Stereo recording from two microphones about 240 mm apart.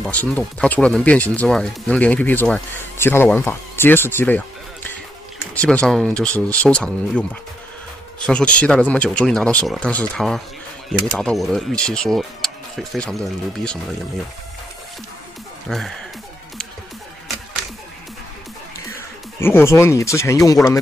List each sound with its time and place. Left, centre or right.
0.0 s speech: centre
5.5 s speech: centre
8.3 s speech: centre
15.7 s speech: centre
19.4 s speech: centre